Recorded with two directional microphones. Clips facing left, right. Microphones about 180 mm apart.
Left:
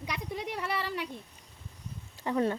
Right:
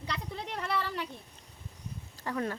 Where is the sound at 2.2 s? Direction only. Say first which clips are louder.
Left 5 dB; 25° left (ahead or behind).